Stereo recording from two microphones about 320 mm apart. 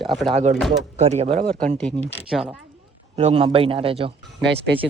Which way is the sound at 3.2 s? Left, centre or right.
Centre.